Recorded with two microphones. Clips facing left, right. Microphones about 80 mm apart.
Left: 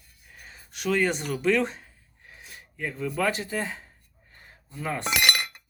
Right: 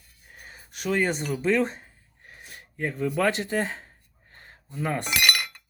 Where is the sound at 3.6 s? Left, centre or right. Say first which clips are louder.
Right 2 dB; right.